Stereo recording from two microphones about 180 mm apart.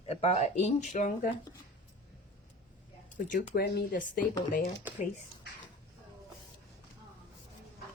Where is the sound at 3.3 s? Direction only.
60° left (ahead or behind).